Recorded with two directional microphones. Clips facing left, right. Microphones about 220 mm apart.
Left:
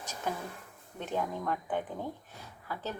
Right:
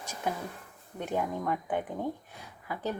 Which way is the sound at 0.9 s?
15° right (ahead or behind).